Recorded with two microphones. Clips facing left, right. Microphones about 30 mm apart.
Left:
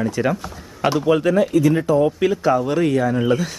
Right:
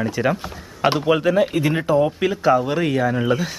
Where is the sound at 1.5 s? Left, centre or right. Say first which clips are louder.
Left 4 dB; right.